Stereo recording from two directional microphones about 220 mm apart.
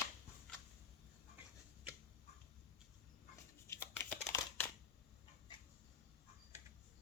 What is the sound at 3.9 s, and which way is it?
Crumpling, 10° left (ahead or behind).